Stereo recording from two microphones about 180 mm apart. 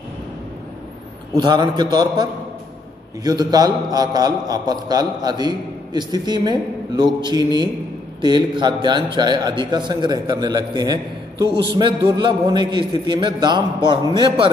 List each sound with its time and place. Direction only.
1.3 s a man's voice: 25° right (ahead or behind)
3.3 s a man's voice: 20° right (ahead or behind)